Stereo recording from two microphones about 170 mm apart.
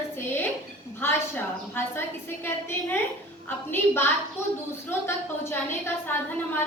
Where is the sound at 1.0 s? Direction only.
15° left (ahead or behind).